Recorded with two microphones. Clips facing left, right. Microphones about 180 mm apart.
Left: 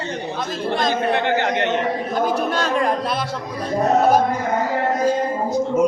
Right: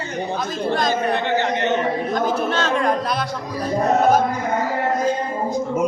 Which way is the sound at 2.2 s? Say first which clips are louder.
Left 3 dB; 10° left (ahead or behind).